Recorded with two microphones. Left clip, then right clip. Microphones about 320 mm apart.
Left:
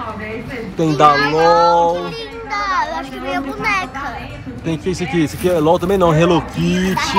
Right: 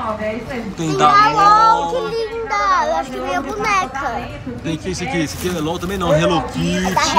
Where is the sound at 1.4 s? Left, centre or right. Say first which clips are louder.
Right 1 dB; right.